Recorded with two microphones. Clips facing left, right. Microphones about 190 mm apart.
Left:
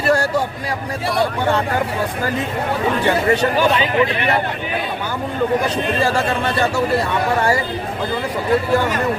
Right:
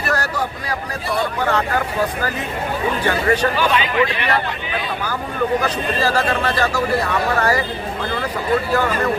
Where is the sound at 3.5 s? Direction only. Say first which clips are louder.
Left 2 dB; 45° left (ahead or behind).